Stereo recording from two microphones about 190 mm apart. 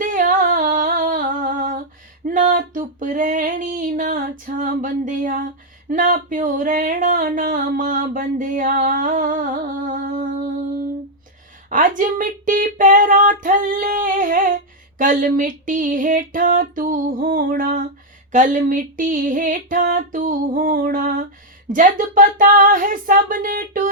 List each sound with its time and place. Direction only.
0.0 s humming: 45° right (ahead or behind)
2.2 s a sound: 45° right (ahead or behind)
5.9 s speech: 45° right (ahead or behind)
9.9 s music: 50° right (ahead or behind)
11.7 s speech: 45° right (ahead or behind)